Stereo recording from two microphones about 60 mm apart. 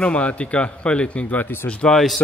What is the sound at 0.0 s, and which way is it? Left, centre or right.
A man's voice, left.